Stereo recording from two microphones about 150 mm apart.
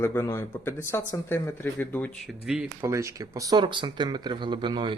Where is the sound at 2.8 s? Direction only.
20° right (ahead or behind).